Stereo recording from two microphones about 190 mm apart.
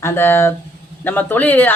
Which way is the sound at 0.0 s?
10° left (ahead or behind).